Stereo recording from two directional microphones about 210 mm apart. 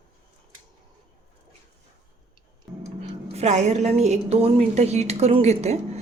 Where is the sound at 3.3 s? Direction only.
30° right (ahead or behind).